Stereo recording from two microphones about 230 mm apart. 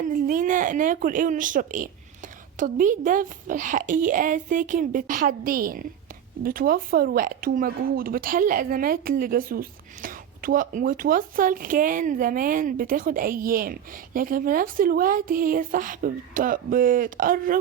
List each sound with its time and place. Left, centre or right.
0.0 s speech: right